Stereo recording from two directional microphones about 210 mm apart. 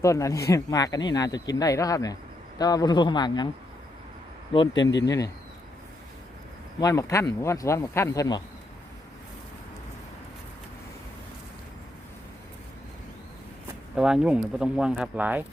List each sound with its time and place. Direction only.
0.0 s a man's voice: 15° left (ahead or behind)
4.5 s a man's voice: 20° left (ahead or behind)
6.7 s speech: 15° left (ahead or behind)
13.9 s speech: 5° right (ahead or behind)